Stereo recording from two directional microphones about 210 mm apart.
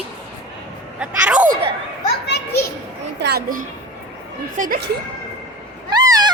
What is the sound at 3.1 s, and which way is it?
A child's voice, 50° right (ahead or behind).